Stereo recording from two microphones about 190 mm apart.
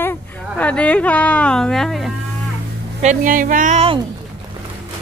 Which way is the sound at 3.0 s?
40° right (ahead or behind).